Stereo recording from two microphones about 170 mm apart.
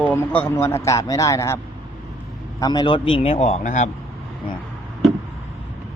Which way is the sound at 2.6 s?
25° left (ahead or behind).